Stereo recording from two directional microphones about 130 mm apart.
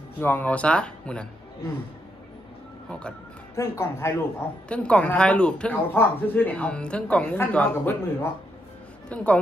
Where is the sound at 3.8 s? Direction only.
20° left (ahead or behind).